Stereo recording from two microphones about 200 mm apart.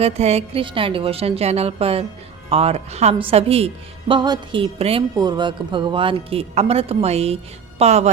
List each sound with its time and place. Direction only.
0.0 s a woman's voice: 30° right (ahead or behind)